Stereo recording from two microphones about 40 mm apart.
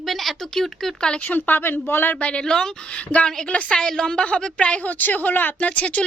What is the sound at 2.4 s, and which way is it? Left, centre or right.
Speech, centre.